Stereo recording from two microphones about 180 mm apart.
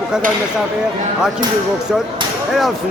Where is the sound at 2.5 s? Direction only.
Centre (ahead or behind).